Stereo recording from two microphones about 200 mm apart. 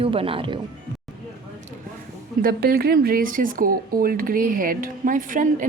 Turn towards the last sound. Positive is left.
turn(degrees=-40)  # may be behind; listen again after turning